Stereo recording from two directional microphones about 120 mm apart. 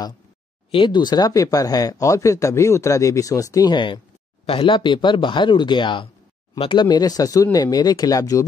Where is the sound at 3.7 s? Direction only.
40° left (ahead or behind).